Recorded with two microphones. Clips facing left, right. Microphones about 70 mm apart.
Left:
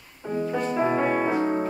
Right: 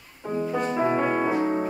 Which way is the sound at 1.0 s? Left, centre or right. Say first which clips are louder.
Even; centre.